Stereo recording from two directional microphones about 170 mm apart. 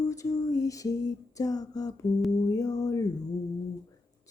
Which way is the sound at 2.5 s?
20° left (ahead or behind).